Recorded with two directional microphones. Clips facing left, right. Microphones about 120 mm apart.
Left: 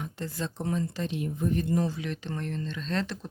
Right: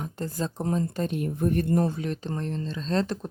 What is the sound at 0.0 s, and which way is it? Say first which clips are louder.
Speech: right 3 dB; 40° right (ahead or behind).